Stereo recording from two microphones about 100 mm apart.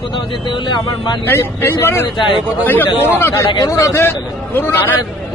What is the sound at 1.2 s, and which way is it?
Speech, 25° left (ahead or behind).